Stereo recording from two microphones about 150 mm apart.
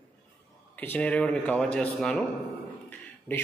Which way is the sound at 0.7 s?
10° left (ahead or behind).